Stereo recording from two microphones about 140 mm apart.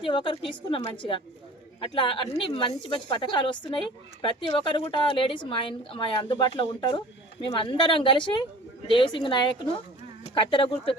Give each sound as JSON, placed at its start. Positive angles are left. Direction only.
{"t": 0.0, "sound": "speech", "side_deg": 35}